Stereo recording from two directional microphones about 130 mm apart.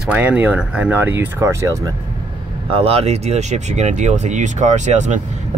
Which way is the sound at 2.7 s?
50° right (ahead or behind).